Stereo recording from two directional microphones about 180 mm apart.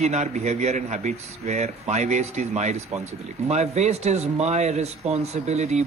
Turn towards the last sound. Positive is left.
turn(degrees=-40)  # may be behind; listen again after turning